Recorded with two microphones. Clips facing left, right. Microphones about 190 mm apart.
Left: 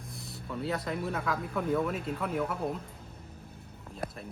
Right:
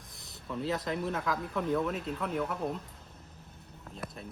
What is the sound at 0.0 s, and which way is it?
Speech, centre (ahead or behind).